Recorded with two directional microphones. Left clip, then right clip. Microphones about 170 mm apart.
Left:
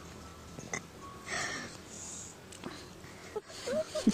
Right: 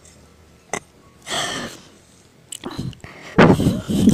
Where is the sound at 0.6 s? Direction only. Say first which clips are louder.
Right 12 dB; 30° right (ahead or behind).